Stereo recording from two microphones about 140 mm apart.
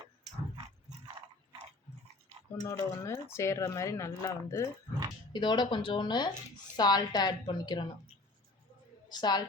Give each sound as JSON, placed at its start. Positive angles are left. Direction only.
{"t": 2.6, "sound": "speech", "side_deg": 20}
{"t": 5.3, "sound": "speech", "side_deg": 35}
{"t": 9.0, "sound": "a woman's voice", "side_deg": 30}